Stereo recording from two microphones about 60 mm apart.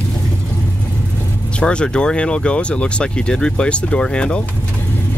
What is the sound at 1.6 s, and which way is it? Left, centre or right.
Speech, centre.